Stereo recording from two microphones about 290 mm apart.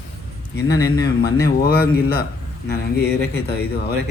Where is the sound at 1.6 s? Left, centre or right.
Left.